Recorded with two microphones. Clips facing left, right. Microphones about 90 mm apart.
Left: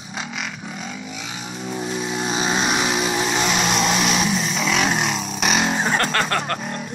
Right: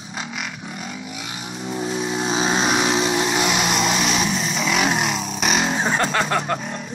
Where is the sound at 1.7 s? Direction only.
Centre (ahead or behind).